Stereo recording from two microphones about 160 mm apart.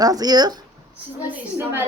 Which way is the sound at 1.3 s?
15° right (ahead or behind).